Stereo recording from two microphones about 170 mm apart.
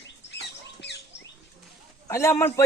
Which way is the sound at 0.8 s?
90° left.